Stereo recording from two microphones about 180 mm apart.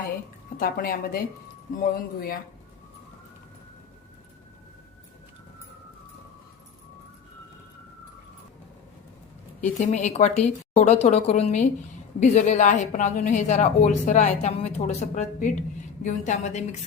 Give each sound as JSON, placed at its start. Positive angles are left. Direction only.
{"t": 0.5, "sound": "speech", "side_deg": 55}
{"t": 9.6, "sound": "a woman's voice", "side_deg": 40}